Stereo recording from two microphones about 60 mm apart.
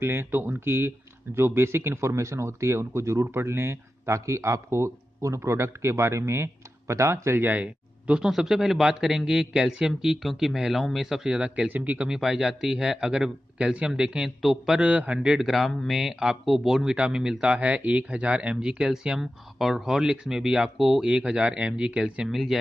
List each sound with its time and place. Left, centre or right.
0.0 s speech: right
7.3 s speech: right
7.6 s a sound: centre
8.3 s speech: centre; by 12.1 s right
12.1 s speech: centre
14.4 s speech: centre
14.8 s speech: right
15.2 s speech: centre
19.1 s speech: centre
21.1 s speech: centre
22.3 s speech: centre